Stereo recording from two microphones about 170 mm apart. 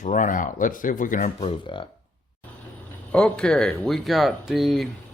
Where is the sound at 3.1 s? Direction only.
5° left (ahead or behind).